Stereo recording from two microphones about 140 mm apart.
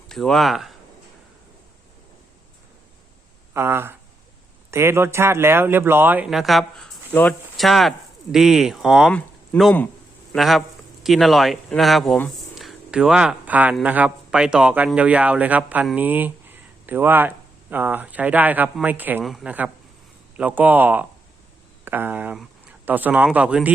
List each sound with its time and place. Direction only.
0.1 s speech: 5° left (ahead or behind)
3.5 s speech: 15° right (ahead or behind); by 6.9 s centre (ahead or behind)
7.1 s speech: 10° left (ahead or behind)
7.5 s speech: centre (ahead or behind)
9.5 s speech: 10° left (ahead or behind)
10.3 s speech: centre (ahead or behind)
12.5 s a sound: 5° right (ahead or behind)
13.8 s speech: 10° right (ahead or behind)
19.2 s speech: centre (ahead or behind)